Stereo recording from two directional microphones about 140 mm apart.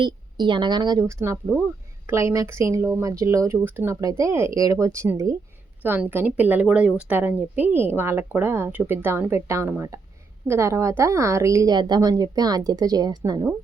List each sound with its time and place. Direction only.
0.0 s a woman's voice: 35° right (ahead or behind)
1.0 s a woman's voice: 20° right (ahead or behind)